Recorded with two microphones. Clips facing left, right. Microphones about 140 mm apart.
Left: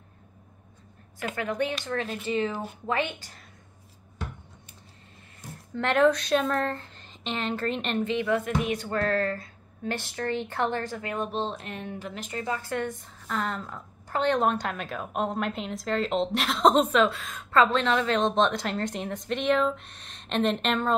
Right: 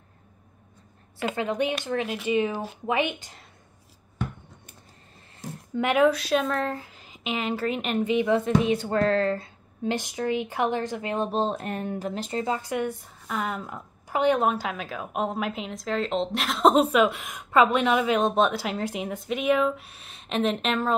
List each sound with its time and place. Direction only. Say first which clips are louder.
1.3 s speech: right 2 dB; 20° right (ahead or behind)
5.8 s speech: right 1 dB; 10° right (ahead or behind)
11.2 s speech: right 5 dB; 40° right (ahead or behind); by 20.9 s centre (ahead or behind)